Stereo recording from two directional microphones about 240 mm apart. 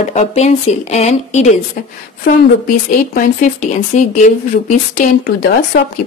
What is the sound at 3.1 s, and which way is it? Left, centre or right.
A woman's voice, left.